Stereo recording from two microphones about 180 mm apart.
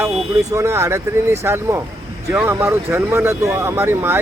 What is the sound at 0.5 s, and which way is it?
Speech, 15° right (ahead or behind).